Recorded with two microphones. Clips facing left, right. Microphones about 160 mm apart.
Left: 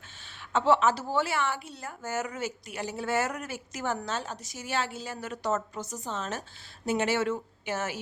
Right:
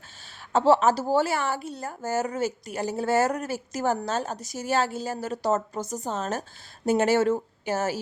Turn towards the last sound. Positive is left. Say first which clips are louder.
# right 6 dB
turn(degrees=-40)  # may be behind; listen again after turning